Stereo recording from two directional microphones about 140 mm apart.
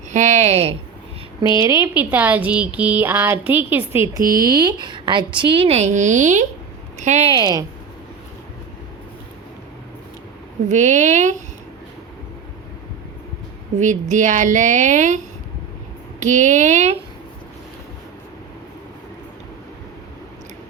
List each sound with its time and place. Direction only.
0.1 s a woman's voice: 60° right (ahead or behind)
1.4 s a woman's voice: 25° right (ahead or behind); by 7.3 s 55° right (ahead or behind)
7.3 s a woman's voice: 30° right (ahead or behind)
10.7 s a woman's voice: 60° right (ahead or behind)
13.7 s a woman's voice: 60° right (ahead or behind)
16.2 s a woman's voice: 60° right (ahead or behind)